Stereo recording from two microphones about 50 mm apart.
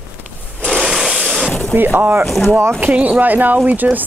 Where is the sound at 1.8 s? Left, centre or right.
Right.